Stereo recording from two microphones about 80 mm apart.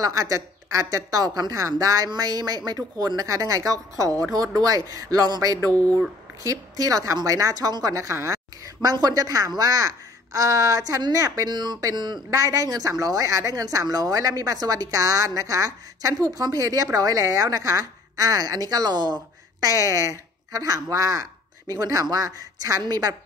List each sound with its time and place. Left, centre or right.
0.0 s speech: right
5.7 s speech: centre
6.4 s speech: right
8.9 s speech: right
11.4 s speech: right
12.3 s speech: right
19.6 s speech: right